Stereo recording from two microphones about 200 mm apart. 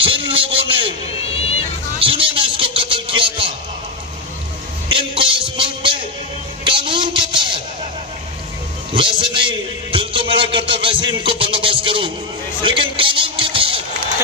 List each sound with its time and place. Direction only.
0.3 s a man's voice: 25° right (ahead or behind)
1.2 s music: 30° left (ahead or behind)
2.0 s a sound: 25° right (ahead or behind)
4.8 s music: 25° right (ahead or behind)
6.6 s a sound: 25° right (ahead or behind)
8.9 s music: 25° right (ahead or behind)